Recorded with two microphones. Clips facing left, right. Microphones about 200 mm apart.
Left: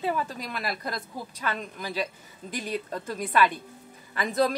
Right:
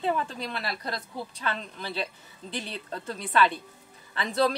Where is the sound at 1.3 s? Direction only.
10° left (ahead or behind).